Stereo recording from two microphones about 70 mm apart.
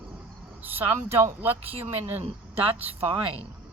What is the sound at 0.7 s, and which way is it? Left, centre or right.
Speech, right.